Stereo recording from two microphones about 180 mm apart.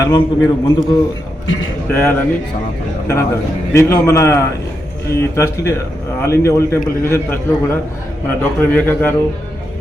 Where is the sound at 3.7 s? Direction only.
15° left (ahead or behind).